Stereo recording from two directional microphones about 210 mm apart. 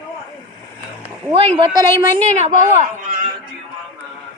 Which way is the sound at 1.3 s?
25° right (ahead or behind).